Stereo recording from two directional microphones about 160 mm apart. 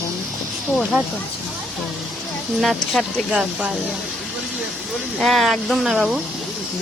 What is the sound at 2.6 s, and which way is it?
Speech, centre (ahead or behind).